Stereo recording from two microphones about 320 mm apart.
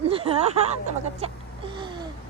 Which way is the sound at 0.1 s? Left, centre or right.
Centre.